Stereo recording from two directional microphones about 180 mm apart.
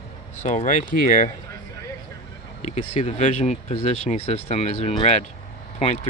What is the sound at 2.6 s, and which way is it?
Speech, 40° left (ahead or behind).